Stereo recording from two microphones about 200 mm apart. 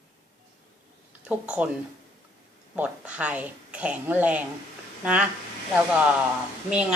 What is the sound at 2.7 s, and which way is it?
A woman's voice, 5° right (ahead or behind).